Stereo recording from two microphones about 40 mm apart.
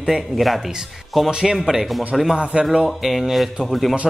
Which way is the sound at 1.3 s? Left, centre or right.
Centre.